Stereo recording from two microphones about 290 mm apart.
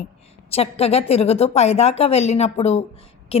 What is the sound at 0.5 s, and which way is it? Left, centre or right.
A woman's voice, left.